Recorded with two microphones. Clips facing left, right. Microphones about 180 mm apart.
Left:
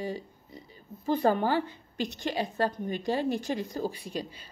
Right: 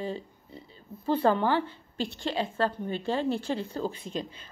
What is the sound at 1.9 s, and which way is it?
A woman's voice, 15° left (ahead or behind).